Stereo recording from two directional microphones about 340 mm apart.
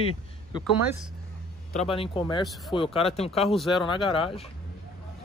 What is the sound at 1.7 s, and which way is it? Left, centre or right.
Speech, centre.